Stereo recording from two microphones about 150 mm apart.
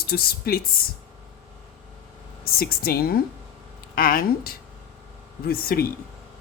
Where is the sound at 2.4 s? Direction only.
85° left.